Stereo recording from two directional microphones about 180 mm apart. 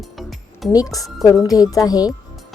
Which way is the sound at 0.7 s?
20° left (ahead or behind).